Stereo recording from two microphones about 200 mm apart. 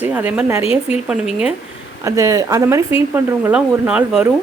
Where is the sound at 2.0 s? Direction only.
15° right (ahead or behind).